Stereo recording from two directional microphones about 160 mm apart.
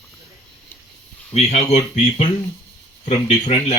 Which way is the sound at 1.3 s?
40° left (ahead or behind).